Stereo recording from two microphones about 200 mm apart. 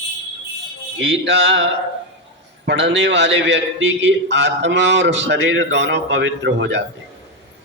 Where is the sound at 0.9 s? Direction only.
65° right (ahead or behind).